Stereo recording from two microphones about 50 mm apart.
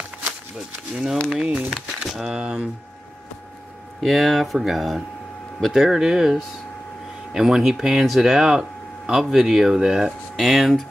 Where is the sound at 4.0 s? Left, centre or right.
Centre.